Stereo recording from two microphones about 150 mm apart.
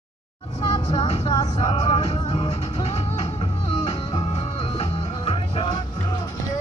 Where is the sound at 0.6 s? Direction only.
25° left (ahead or behind).